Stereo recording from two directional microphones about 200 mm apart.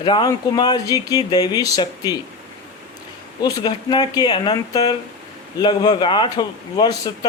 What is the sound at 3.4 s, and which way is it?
A man's voice, 20° left (ahead or behind).